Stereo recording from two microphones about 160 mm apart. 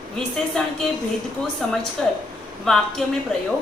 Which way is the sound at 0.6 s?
5° left (ahead or behind).